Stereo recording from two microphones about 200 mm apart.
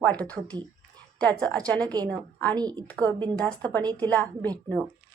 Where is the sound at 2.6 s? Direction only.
20° right (ahead or behind).